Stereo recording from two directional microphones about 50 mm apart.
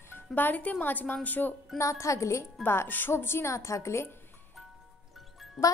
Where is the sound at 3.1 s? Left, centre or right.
Left.